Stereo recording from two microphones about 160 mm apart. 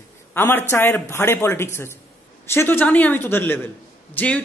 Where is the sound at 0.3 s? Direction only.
15° left (ahead or behind).